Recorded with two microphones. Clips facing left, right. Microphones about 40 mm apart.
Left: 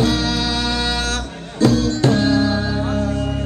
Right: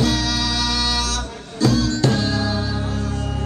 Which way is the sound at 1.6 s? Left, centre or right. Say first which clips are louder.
Left 3 dB; left.